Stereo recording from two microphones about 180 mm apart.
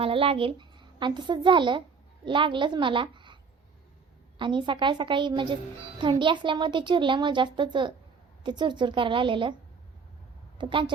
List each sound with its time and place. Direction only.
0.0 s a woman's voice: 30° right (ahead or behind)
4.4 s a woman's voice: 25° right (ahead or behind)
10.6 s a woman's voice: 25° right (ahead or behind)